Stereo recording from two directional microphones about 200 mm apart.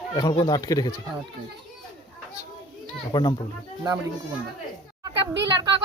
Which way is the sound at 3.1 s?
20° left (ahead or behind).